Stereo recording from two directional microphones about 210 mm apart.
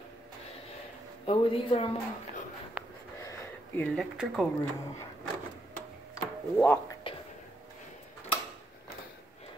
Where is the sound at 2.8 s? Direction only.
5° right (ahead or behind).